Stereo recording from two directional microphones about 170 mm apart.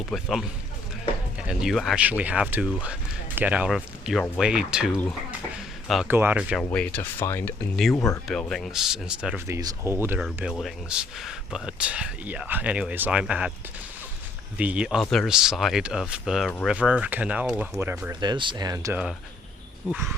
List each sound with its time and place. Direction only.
0.1 s speech: centre (ahead or behind)
6.1 s speech: 10° right (ahead or behind)
6.7 s speech: 10° left (ahead or behind)
8.3 s speech: 5° left (ahead or behind)
9.5 s speech: 20° right (ahead or behind)
10.2 s speech: centre (ahead or behind)
14.6 s speech: 5° right (ahead or behind)
18.2 s speech: 25° right (ahead or behind)